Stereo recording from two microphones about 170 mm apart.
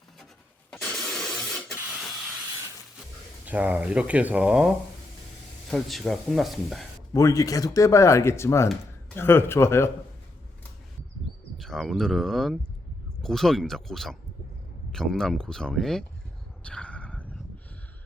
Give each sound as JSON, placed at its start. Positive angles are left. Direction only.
{"t": 0.7, "sound": "a sound", "side_deg": 5}
{"t": 3.4, "sound": "speech", "side_deg": -10}
{"t": 5.7, "sound": "speech", "side_deg": 0}
{"t": 7.1, "sound": "speech", "side_deg": 20}
{"t": 11.5, "sound": "speech", "side_deg": 0}
{"t": 16.6, "sound": "a sound", "side_deg": 5}